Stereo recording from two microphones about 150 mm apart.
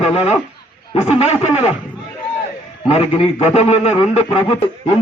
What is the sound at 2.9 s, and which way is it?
A man's voice, 45° left (ahead or behind).